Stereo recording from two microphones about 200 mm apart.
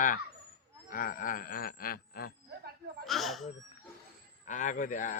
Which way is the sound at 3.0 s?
Centre (ahead or behind).